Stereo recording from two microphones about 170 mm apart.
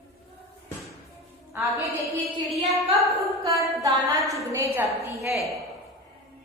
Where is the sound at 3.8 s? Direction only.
20° right (ahead or behind).